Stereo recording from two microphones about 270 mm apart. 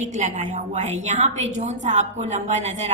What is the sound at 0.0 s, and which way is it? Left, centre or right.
A woman's voice, right.